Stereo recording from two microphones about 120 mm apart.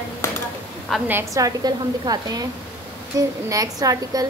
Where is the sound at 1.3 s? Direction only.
30° right (ahead or behind).